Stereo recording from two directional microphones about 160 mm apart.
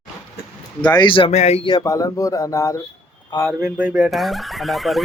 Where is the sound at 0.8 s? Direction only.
25° left (ahead or behind); by 1.7 s 40° left (ahead or behind).